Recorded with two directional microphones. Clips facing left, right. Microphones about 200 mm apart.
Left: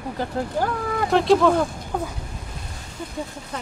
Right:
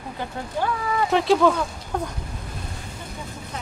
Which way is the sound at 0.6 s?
55° left (ahead or behind).